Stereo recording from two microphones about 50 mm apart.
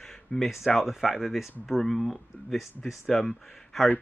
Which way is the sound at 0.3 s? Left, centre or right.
Left.